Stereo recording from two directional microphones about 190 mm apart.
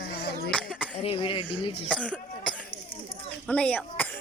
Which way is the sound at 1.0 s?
30° left (ahead or behind).